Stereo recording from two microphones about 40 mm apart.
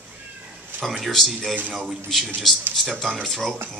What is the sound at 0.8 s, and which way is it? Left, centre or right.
Speech, centre.